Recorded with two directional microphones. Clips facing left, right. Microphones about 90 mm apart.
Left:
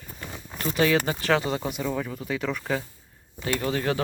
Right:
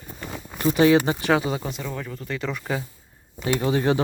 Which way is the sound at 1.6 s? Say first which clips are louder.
Left 3 dB; 10° left (ahead or behind).